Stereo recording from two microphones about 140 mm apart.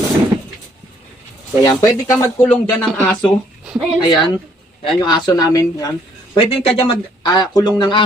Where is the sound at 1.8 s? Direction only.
20° left (ahead or behind).